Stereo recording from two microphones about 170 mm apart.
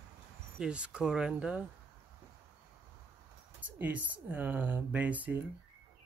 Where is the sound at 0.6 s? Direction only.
5° right (ahead or behind).